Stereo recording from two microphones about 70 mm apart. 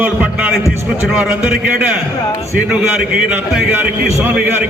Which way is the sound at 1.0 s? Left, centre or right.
Centre.